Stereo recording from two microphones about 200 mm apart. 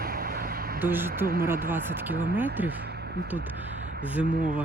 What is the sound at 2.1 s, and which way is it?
Speech, 45° right (ahead or behind).